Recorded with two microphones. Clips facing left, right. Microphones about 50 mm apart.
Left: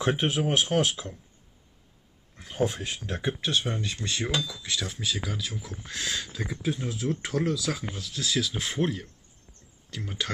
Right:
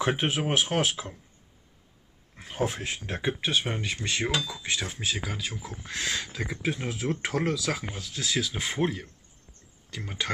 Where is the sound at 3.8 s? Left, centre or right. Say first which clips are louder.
Right 2 dB; right.